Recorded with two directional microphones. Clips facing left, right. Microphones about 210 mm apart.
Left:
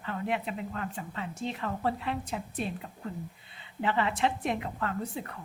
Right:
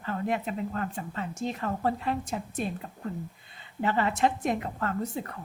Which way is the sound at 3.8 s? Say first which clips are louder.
Right 2 dB; 40° right (ahead or behind).